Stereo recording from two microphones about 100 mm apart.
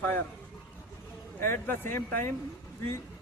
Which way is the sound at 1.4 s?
20° left (ahead or behind).